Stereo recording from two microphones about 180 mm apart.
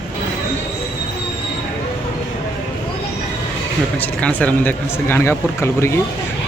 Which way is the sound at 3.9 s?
10° left (ahead or behind).